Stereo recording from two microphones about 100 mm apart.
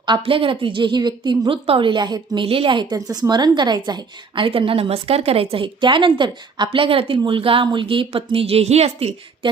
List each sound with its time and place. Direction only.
0.2 s a woman's voice: 60° right (ahead or behind)
1.6 s a woman's voice: 65° right (ahead or behind)
6.7 s a woman's voice: 65° right (ahead or behind); by 9.0 s 90° right